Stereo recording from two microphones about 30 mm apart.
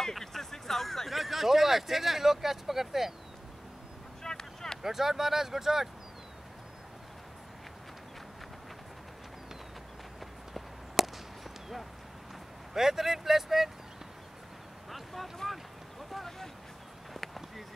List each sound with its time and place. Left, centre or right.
0.1 s speech: centre
4.2 s vehicle: left
4.8 s speech: centre
11.0 s a sound: centre
12.7 s speech: centre
14.9 s vehicle: centre
17.1 s a sound: centre